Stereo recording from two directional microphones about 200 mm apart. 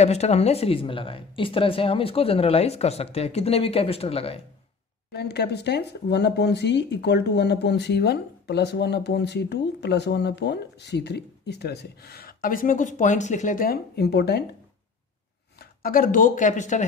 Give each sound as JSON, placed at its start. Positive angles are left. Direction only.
{"t": 0.0, "sound": "speech", "side_deg": 35}
{"t": 5.1, "sound": "speech", "side_deg": 55}
{"t": 15.6, "sound": "speech", "side_deg": 45}